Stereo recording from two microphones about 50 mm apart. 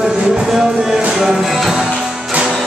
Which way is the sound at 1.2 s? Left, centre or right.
Centre.